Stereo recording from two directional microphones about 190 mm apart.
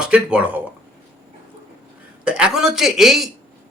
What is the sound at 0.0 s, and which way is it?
Speech, 5° right (ahead or behind).